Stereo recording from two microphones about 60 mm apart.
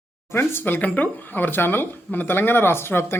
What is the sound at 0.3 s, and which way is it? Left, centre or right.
Speech, left.